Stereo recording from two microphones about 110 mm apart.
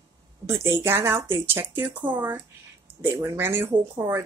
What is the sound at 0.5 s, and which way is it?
Speech, 25° right (ahead or behind).